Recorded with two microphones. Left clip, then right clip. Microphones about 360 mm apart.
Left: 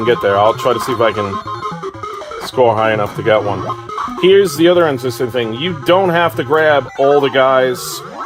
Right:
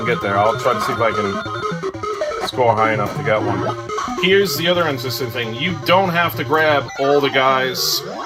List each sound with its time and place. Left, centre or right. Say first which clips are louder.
0.3 s speech: left 3 dB; left
2.6 s speech: left 4 dB; left